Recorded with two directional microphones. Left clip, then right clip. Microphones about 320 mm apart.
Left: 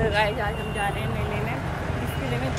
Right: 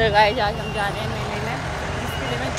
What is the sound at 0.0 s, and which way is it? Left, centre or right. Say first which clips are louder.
Vehicle: right 7 dB; right.